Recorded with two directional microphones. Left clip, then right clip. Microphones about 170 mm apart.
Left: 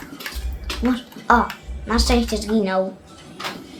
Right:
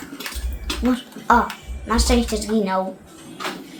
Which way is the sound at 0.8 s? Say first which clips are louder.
Even; 25° left (ahead or behind).